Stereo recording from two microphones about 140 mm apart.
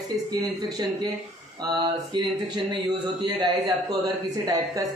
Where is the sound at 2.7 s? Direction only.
30° right (ahead or behind).